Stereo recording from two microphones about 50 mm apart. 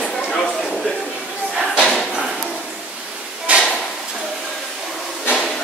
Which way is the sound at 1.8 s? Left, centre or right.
Centre.